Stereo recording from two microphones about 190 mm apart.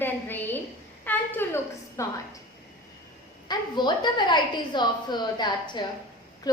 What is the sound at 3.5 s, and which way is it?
A woman's voice, 25° left (ahead or behind).